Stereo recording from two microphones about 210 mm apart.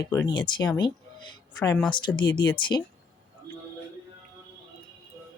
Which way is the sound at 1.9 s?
20° left (ahead or behind).